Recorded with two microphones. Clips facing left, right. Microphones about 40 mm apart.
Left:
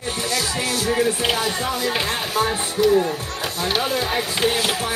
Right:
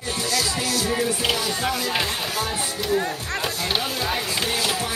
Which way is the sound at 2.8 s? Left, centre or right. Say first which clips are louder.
Left 8 dB; centre.